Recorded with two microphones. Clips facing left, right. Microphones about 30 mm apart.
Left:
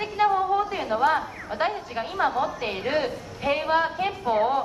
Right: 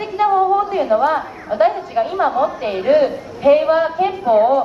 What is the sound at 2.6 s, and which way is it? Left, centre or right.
A woman's voice, centre.